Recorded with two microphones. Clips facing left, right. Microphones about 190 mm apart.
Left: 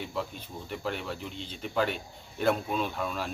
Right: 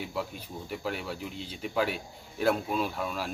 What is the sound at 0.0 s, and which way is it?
Speech, 5° right (ahead or behind).